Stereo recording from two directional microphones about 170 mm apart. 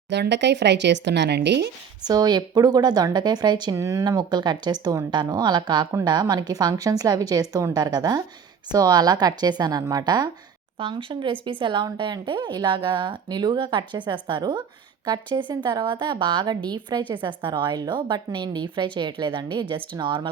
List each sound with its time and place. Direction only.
0.1 s speech: 90° right
2.0 s a woman's voice: 25° right (ahead or behind)